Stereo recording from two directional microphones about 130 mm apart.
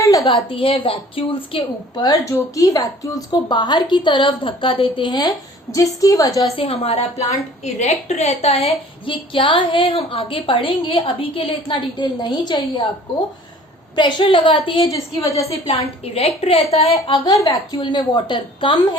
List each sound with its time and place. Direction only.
0.3 s a woman's voice: 45° left (ahead or behind)
2.0 s a woman's voice: 25° left (ahead or behind)
6.6 s a woman's voice: 50° left (ahead or behind)
7.6 s a woman's voice: 60° left (ahead or behind); by 12.8 s 35° left (ahead or behind)
13.9 s a woman's voice: 35° left (ahead or behind)
17.2 s speech: 25° left (ahead or behind)